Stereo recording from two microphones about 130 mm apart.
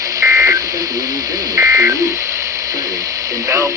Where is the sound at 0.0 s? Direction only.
25° right (ahead or behind).